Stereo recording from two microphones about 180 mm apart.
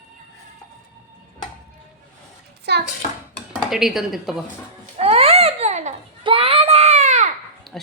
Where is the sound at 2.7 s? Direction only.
65° right (ahead or behind).